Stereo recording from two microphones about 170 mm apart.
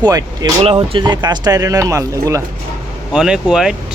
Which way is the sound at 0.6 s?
35° right (ahead or behind).